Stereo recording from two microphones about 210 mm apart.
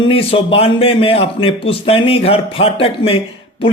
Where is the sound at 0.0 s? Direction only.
25° left (ahead or behind).